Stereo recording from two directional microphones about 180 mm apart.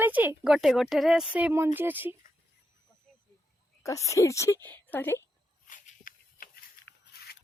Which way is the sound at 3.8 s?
15° left (ahead or behind).